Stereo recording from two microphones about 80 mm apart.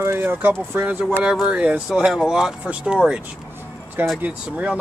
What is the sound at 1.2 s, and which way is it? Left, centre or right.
Speech, centre.